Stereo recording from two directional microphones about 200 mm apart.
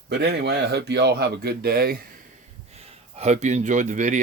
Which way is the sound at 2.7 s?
30° right (ahead or behind).